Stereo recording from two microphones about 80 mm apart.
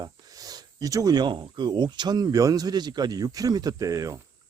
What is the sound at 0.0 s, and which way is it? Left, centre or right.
Speech, right.